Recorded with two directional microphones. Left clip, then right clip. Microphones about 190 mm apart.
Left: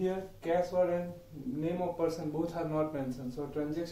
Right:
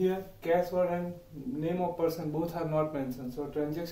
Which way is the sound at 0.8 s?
10° right (ahead or behind).